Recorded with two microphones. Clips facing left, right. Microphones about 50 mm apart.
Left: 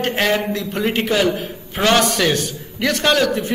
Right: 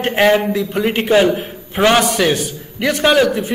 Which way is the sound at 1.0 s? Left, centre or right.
Right.